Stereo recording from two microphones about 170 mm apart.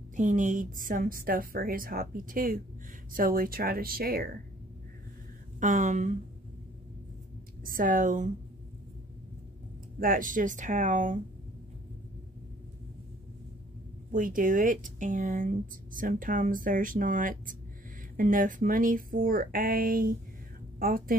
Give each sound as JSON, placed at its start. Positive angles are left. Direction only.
{"t": 0.1, "sound": "a woman's voice", "side_deg": -50}
{"t": 5.6, "sound": "speech", "side_deg": -50}
{"t": 7.6, "sound": "speech", "side_deg": -55}
{"t": 9.9, "sound": "speech", "side_deg": -55}
{"t": 14.1, "sound": "a woman's voice", "side_deg": -50}